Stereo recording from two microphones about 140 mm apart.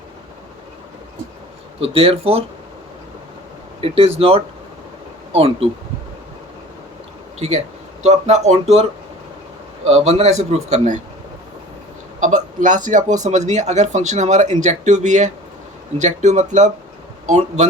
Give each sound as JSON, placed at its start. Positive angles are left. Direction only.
{"t": 1.8, "sound": "a man's voice", "side_deg": -40}
{"t": 3.8, "sound": "a man's voice", "side_deg": -45}
{"t": 7.3, "sound": "a man's voice", "side_deg": -50}
{"t": 12.2, "sound": "speech", "side_deg": -65}